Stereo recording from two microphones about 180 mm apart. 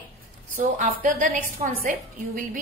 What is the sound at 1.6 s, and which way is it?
Speech, 35° right (ahead or behind).